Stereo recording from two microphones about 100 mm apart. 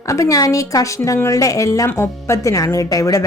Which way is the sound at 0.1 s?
35° left (ahead or behind).